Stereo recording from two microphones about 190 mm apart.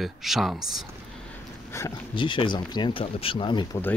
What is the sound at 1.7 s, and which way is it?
Speech, 20° left (ahead or behind).